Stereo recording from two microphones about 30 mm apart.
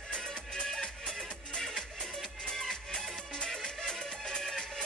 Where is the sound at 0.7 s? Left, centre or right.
Centre.